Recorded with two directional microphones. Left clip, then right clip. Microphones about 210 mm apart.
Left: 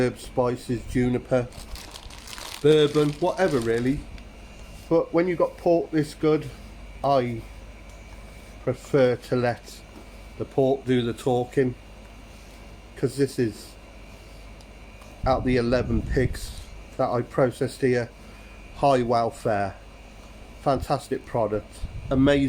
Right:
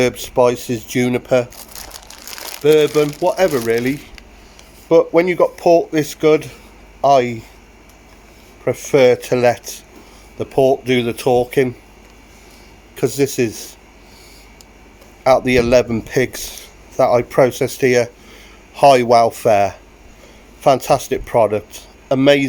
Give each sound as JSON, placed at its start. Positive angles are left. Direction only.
{"t": 0.0, "sound": "speech", "side_deg": -45}
{"t": 1.9, "sound": "speech", "side_deg": -30}
{"t": 8.6, "sound": "speech", "side_deg": -40}
{"t": 13.0, "sound": "speech", "side_deg": -40}
{"t": 15.2, "sound": "speech", "side_deg": -40}